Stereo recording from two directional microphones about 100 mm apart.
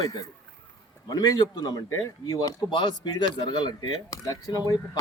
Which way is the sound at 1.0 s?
45° left (ahead or behind).